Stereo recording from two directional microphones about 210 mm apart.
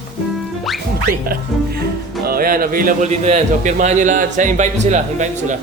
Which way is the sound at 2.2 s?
45° right (ahead or behind).